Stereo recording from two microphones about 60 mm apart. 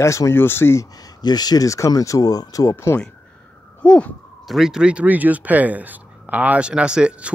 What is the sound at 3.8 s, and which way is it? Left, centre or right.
Speech, left.